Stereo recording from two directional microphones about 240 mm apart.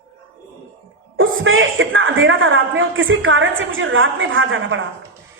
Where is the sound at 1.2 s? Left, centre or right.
Right.